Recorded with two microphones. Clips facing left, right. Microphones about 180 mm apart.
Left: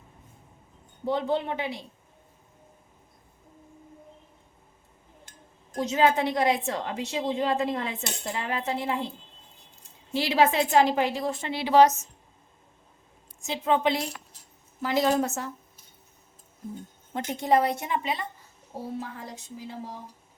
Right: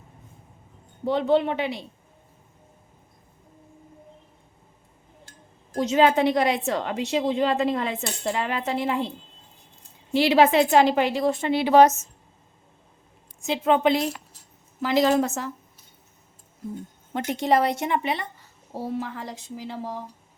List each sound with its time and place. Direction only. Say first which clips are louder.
1.0 s a woman's voice: right 6 dB; 75° right (ahead or behind)
5.7 s a woman's voice: right 4 dB; 75° right (ahead or behind)
10.2 s a woman's voice: right 5 dB; 70° right (ahead or behind); by 12.0 s 50° right (ahead or behind)
13.4 s a woman's voice: right 4 dB; 65° right (ahead or behind)
14.8 s a woman's voice: right 4 dB; 90° right
17.2 s a woman's voice: right 2 dB; 70° right (ahead or behind)
18.8 s a woman's voice: right 5 dB; 90° right